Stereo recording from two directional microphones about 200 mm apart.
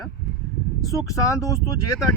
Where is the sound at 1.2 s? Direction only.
15° left (ahead or behind).